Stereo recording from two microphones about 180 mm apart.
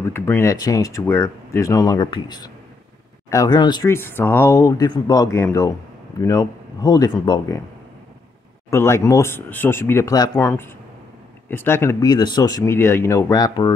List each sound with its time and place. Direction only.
0.1 s speech: 15° left (ahead or behind)
3.9 s speech: 10° left (ahead or behind)
8.6 s speech: 15° left (ahead or behind)